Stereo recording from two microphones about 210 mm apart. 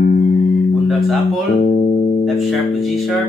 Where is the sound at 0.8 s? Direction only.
Centre (ahead or behind).